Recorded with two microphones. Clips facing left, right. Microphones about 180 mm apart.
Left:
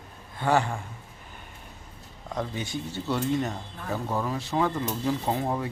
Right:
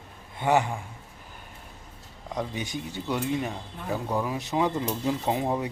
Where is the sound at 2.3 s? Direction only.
15° right (ahead or behind).